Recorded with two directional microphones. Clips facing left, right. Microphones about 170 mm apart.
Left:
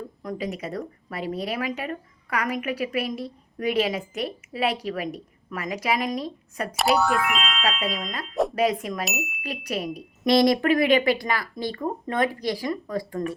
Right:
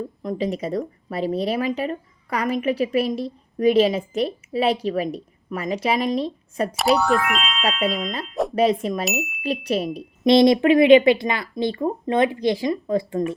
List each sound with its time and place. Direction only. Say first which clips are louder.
0.2 s speech: right 5 dB; 25° right (ahead or behind)
6.7 s speech: right 2 dB; centre (ahead or behind)
8.5 s speech: right 4 dB; 30° right (ahead or behind)
9.0 s speech: right 5 dB; centre (ahead or behind)
9.4 s speech: right 8 dB; 30° right (ahead or behind)